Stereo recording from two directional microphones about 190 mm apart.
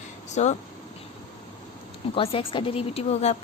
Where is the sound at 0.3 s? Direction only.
35° left (ahead or behind).